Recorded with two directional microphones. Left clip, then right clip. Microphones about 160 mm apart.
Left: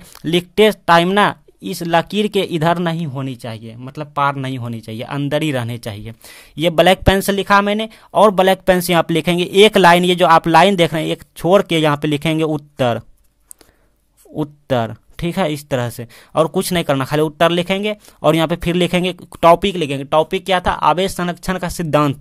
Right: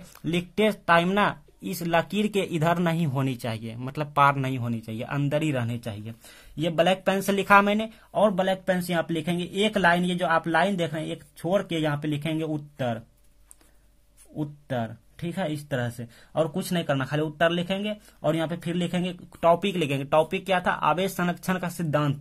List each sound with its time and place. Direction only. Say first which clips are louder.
0.2 s speech: left 12 dB; 40° left (ahead or behind)
3.1 s speech: left 3 dB; 15° left (ahead or behind); by 7.9 s 35° left (ahead or behind)
8.1 s speech: left 12 dB; 70° left (ahead or behind); by 13.0 s 90° left
14.3 s speech: left 12 dB; 90° left; by 18.3 s 55° left (ahead or behind)
18.3 s speech: left 12 dB; 90° left; by 19.6 s 55° left (ahead or behind)
19.6 s speech: left 8 dB; 35° left (ahead or behind)